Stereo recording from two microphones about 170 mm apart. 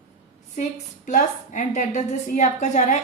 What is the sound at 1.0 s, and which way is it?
A woman's voice, 45° left (ahead or behind).